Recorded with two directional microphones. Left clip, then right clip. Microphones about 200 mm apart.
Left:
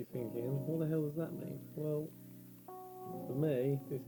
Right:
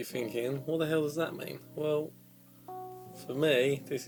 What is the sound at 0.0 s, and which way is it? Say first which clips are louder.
Speech: right 7 dB; 10° right (ahead or behind).